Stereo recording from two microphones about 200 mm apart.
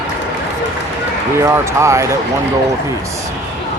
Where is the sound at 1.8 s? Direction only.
15° right (ahead or behind).